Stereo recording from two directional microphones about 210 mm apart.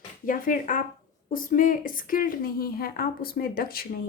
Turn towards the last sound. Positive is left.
turn(degrees=45)  # may be behind; listen again after turning